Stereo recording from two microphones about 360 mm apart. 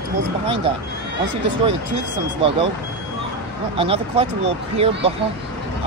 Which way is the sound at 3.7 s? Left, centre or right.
Centre.